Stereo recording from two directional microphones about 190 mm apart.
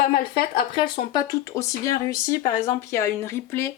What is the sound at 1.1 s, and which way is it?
Speech, 20° left (ahead or behind).